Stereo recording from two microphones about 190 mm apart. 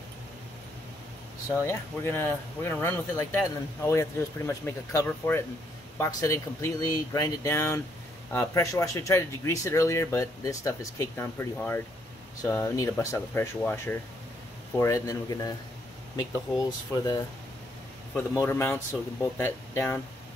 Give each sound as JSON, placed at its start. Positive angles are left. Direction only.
{"t": 1.6, "sound": "speech", "side_deg": 10}